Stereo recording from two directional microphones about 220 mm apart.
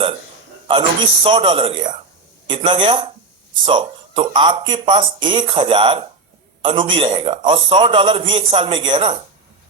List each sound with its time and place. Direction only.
0.7 s speech: 25° right (ahead or behind)